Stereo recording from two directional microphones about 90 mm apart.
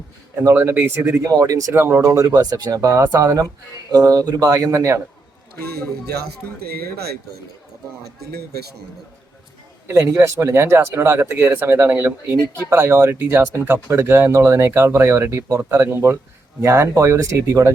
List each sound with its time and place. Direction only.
0.4 s speech: 30° right (ahead or behind)
9.8 s speech: 30° right (ahead or behind)